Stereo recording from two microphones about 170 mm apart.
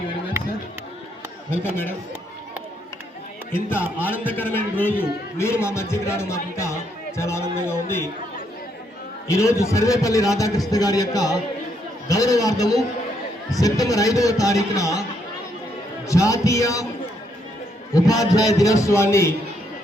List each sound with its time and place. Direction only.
3.5 s a man's voice: 15° left (ahead or behind)
9.2 s a man's voice: 15° left (ahead or behind)
16.0 s a man's voice: 20° left (ahead or behind)
17.9 s a man's voice: 20° left (ahead or behind)